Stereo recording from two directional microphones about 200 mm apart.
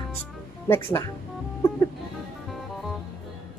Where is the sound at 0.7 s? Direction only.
10° left (ahead or behind).